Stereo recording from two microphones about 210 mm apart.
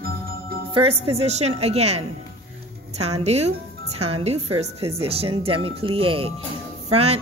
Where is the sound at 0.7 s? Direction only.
25° right (ahead or behind).